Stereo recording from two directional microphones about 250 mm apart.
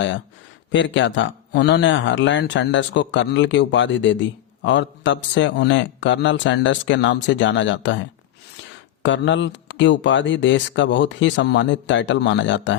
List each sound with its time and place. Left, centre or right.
0.7 s a man's voice: left
9.0 s a man's voice: left